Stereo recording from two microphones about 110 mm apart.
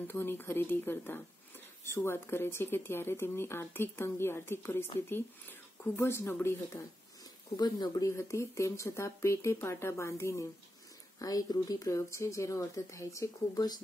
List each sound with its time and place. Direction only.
0.0 s speech: 20° left (ahead or behind)
5.9 s speech: 20° left (ahead or behind)
7.5 s speech: 40° left (ahead or behind)